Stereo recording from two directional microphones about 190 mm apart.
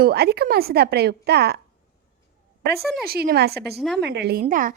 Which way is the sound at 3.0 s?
55° right (ahead or behind).